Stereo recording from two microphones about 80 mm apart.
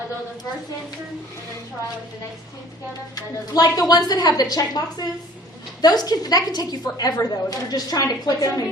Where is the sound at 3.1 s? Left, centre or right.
Left.